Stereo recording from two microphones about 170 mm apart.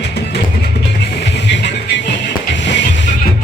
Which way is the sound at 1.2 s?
90° left.